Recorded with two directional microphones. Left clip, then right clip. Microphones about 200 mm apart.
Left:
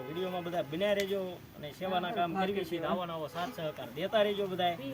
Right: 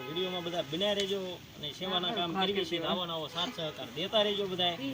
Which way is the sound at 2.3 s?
35° right (ahead or behind).